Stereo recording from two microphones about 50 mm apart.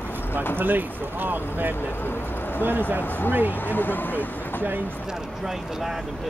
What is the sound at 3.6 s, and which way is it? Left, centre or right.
Speech, left.